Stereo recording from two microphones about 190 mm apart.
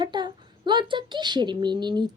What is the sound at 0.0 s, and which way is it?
A woman's voice, 25° right (ahead or behind).